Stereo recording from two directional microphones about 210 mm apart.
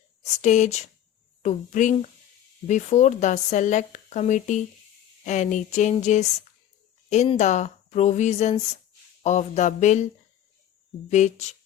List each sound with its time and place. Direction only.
0.2 s speech: 35° left (ahead or behind)
11.1 s speech: 35° left (ahead or behind)